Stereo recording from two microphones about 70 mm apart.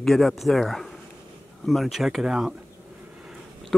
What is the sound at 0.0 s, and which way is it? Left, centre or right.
Speech, centre.